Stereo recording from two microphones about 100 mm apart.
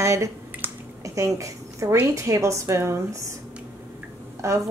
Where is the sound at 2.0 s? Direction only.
30° right (ahead or behind).